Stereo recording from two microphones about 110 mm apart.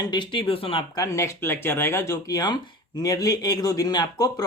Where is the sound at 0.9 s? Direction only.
30° left (ahead or behind).